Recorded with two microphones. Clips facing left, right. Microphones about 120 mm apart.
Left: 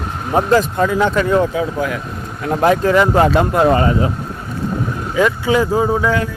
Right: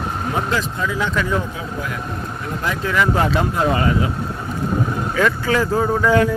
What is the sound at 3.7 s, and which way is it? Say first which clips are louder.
Speech: left 4 dB; 35° left (ahead or behind).